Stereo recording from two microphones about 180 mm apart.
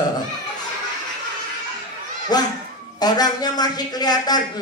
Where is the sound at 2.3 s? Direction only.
20° left (ahead or behind).